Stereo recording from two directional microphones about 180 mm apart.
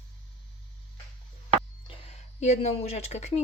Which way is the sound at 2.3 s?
40° left (ahead or behind).